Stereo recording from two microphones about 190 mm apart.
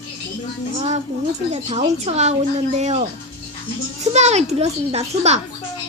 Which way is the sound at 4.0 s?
35° right (ahead or behind).